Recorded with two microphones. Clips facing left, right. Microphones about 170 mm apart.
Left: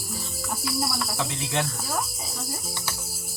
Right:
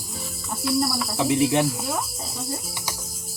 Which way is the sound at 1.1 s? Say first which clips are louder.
Right 9 dB; 20° right (ahead or behind).